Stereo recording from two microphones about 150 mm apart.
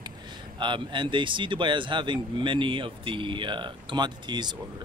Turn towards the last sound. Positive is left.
turn(degrees=-30)  # may be behind; listen again after turning